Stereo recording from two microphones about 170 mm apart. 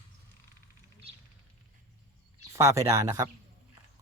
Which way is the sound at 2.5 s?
20° right (ahead or behind).